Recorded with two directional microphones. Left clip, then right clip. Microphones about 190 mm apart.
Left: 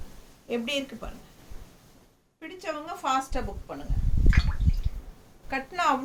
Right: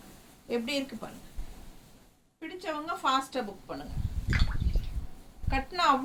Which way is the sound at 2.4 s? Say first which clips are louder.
Left 1 dB; 15° left (ahead or behind).